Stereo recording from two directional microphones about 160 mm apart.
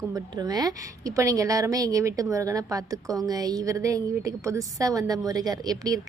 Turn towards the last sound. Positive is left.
turn(degrees=-25)  # may be behind; listen again after turning